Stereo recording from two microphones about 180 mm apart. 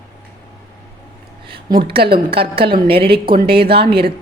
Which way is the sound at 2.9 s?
30° right (ahead or behind).